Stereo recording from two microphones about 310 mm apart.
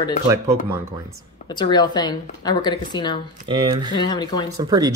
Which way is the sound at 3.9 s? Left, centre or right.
Centre.